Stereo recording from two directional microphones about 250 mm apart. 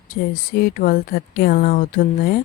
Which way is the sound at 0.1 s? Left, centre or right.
Left.